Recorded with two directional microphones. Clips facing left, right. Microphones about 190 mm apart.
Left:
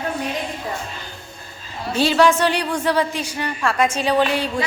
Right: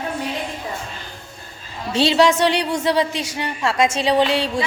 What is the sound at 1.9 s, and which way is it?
A woman's voice, 25° right (ahead or behind).